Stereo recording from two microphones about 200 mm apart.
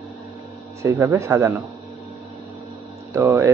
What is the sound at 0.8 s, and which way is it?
Speech, 15° right (ahead or behind).